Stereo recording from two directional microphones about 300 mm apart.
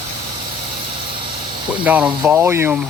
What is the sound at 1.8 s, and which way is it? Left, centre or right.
Speech, centre.